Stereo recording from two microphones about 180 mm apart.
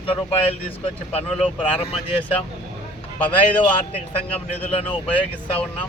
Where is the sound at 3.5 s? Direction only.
30° left (ahead or behind).